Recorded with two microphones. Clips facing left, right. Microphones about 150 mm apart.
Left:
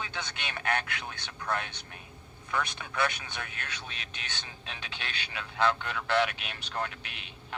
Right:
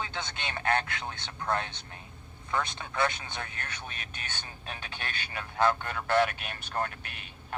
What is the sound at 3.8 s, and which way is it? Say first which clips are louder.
Speech: right 1 dB; 50° right (ahead or behind).